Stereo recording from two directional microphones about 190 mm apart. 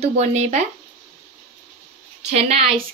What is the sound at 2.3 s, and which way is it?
Speech, 35° right (ahead or behind).